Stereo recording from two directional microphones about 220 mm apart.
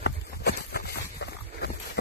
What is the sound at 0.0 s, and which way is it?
Clip-clop, 50° left (ahead or behind).